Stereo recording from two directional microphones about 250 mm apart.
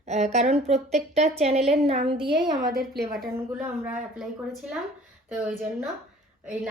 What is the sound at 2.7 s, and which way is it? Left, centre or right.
Speech, right.